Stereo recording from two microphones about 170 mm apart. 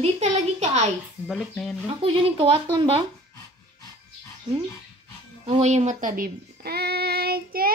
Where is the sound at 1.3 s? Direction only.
Centre (ahead or behind).